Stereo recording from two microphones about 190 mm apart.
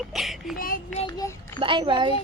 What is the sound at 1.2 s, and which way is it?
Speech, 15° left (ahead or behind).